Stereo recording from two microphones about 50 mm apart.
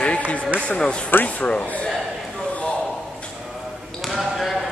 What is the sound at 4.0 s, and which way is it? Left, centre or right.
Basketball bounce, centre.